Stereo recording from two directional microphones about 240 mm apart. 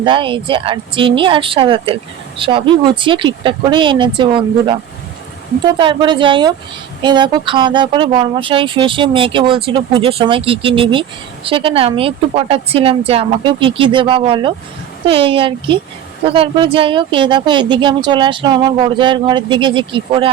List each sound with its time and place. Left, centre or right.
0.0 s speech: right